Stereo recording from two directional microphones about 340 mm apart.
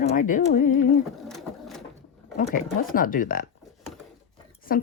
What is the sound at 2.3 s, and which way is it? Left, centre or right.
Speech, left.